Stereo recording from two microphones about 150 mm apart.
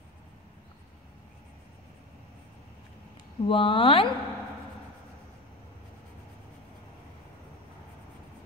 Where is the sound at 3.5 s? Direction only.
35° left (ahead or behind).